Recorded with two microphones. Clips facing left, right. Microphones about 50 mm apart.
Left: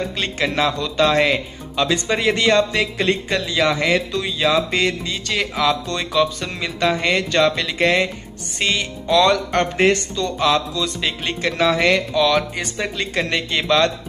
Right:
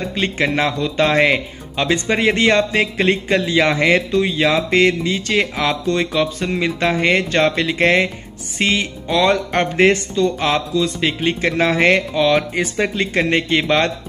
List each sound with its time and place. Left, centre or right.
0.4 s speech: right